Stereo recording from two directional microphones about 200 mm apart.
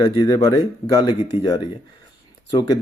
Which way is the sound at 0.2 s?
15° left (ahead or behind).